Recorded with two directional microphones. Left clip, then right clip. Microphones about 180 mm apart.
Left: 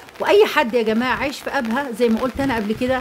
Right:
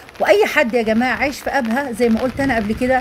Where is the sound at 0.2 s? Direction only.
5° left (ahead or behind).